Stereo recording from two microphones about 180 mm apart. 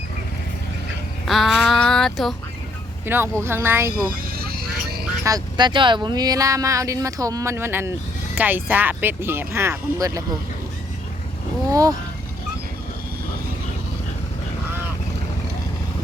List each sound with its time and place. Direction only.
1.2 s a sound: centre (ahead or behind)
3.1 s speech: 15° right (ahead or behind)
4.3 s vehicle: 55° right (ahead or behind)
5.2 s speech: 20° right (ahead or behind)
11.7 s speech: 20° right (ahead or behind)